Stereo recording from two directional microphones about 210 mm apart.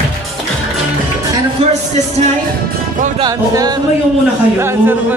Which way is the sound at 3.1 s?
20° right (ahead or behind).